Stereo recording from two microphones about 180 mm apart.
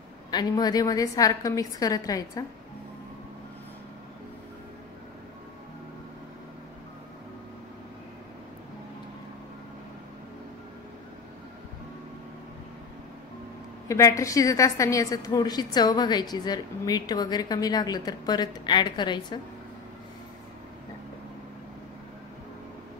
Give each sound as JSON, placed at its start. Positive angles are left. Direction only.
{"t": 0.3, "sound": "a woman's voice", "side_deg": 20}
{"t": 13.8, "sound": "a woman's voice", "side_deg": 15}